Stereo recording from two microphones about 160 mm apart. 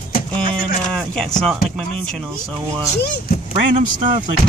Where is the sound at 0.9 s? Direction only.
5° left (ahead or behind).